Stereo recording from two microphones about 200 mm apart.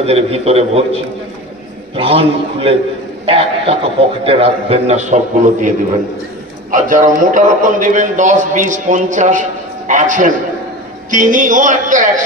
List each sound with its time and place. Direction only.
0.0 s a man's voice: 30° right (ahead or behind)
2.0 s a man's voice: 30° right (ahead or behind)